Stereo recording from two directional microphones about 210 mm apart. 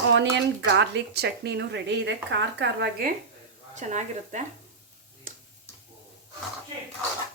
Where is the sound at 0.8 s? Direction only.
55° right (ahead or behind).